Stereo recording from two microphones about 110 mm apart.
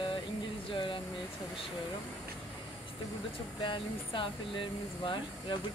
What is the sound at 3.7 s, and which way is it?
Speech, 50° left (ahead or behind).